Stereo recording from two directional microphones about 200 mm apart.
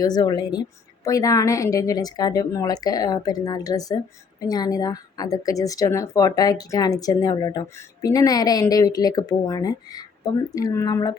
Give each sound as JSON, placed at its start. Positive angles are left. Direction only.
{"t": 0.0, "sound": "a woman's voice", "side_deg": 20}